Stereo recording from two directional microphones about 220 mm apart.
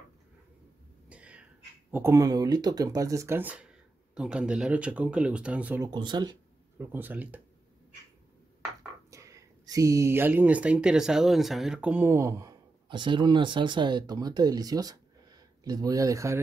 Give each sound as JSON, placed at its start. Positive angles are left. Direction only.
{"t": 1.0, "sound": "a sound", "side_deg": -5}
{"t": 1.9, "sound": "speech", "side_deg": -10}
{"t": 5.9, "sound": "speech", "side_deg": -20}
{"t": 6.8, "sound": "speech", "side_deg": -10}
{"t": 9.1, "sound": "speech", "side_deg": -15}